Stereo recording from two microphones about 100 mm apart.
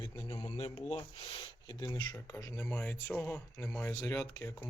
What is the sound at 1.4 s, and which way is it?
Speech, 45° left (ahead or behind).